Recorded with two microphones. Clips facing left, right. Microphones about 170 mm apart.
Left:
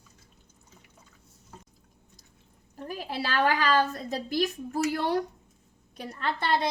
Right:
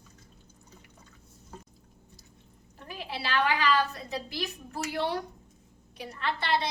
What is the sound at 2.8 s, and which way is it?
A woman's voice, 45° left (ahead or behind).